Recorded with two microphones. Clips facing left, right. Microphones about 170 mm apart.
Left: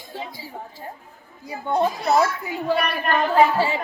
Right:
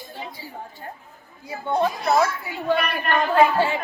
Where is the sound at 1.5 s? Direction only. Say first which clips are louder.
Left 1 dB; 15° left (ahead or behind).